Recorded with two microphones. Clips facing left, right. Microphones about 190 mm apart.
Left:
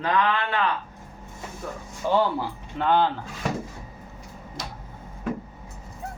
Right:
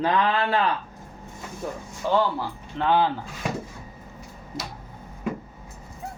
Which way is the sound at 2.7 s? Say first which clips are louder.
Even; 5° right (ahead or behind).